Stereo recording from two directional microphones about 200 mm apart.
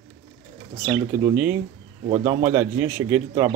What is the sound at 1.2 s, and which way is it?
A man's voice, 10° right (ahead or behind).